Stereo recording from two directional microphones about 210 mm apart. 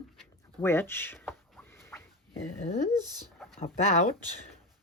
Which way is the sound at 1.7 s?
10° left (ahead or behind).